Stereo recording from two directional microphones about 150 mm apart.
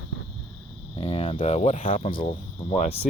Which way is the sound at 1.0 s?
40° left (ahead or behind).